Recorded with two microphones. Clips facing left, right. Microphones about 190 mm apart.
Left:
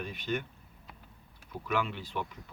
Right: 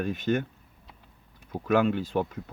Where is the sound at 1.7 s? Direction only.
45° right (ahead or behind).